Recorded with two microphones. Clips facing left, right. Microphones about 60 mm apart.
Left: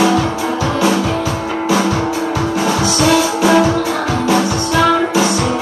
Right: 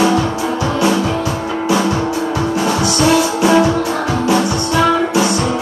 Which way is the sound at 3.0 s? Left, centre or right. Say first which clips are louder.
Even; left.